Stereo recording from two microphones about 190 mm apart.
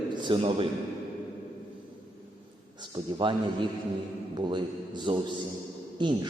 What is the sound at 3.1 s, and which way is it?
A man's voice, 25° right (ahead or behind).